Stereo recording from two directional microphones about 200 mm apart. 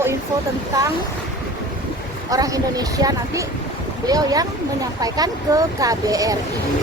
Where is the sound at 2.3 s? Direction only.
15° right (ahead or behind).